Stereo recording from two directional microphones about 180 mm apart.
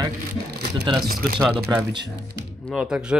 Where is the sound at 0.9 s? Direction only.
25° right (ahead or behind).